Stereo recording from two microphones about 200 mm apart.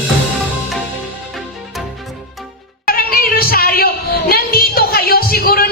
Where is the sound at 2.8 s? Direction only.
45° left (ahead or behind).